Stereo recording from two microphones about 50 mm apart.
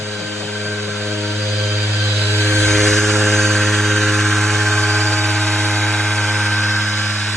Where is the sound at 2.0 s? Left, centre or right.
Right.